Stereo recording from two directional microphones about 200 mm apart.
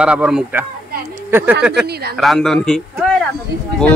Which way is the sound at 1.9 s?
50° right (ahead or behind).